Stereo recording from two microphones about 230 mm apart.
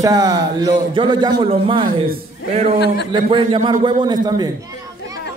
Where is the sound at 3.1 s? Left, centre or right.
Right.